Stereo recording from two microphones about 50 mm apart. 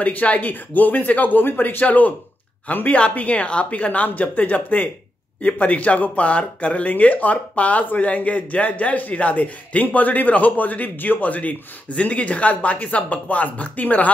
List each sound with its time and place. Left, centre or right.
0.0 s speech: left